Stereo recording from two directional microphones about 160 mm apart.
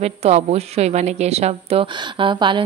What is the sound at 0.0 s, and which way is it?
A woman's voice, 40° right (ahead or behind).